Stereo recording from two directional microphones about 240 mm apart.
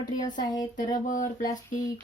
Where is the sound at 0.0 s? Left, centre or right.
Centre.